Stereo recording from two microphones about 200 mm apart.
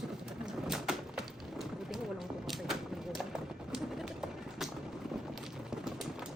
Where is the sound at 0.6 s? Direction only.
Centre (ahead or behind).